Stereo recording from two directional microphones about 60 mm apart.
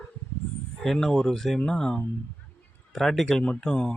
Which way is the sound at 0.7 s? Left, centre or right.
Centre.